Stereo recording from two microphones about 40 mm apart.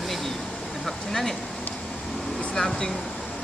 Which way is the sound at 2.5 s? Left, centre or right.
Centre.